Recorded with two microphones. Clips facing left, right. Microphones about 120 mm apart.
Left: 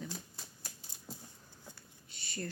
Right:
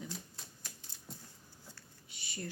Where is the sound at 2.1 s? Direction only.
15° right (ahead or behind).